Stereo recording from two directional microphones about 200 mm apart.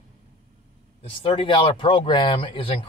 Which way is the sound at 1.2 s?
25° left (ahead or behind).